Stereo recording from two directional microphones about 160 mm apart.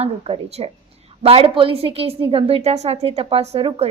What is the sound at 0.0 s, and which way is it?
A woman's voice, 40° right (ahead or behind).